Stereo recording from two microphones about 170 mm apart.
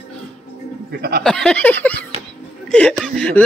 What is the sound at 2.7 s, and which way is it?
Speech, 5° left (ahead or behind).